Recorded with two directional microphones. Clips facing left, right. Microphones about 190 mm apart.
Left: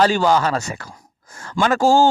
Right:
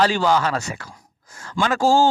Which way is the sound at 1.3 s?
50° left (ahead or behind).